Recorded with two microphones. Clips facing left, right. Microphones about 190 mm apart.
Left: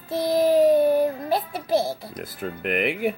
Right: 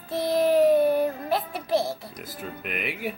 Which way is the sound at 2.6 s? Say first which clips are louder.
Left 9 dB; 60° left (ahead or behind).